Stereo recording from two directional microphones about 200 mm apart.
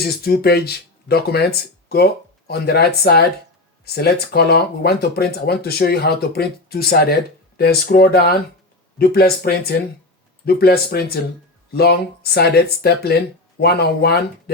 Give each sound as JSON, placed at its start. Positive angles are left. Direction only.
{"t": 0.0, "sound": "speech", "side_deg": 50}